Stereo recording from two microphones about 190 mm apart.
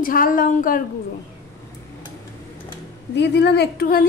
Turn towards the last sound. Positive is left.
turn(degrees=55)  # may be behind; listen again after turning